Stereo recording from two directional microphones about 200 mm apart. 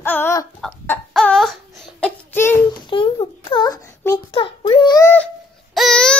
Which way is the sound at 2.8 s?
25° left (ahead or behind).